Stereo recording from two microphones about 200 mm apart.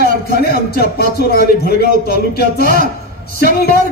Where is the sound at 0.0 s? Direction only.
50° left (ahead or behind).